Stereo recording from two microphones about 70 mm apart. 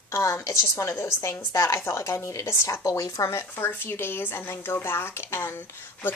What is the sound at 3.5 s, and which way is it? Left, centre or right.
Speech, left.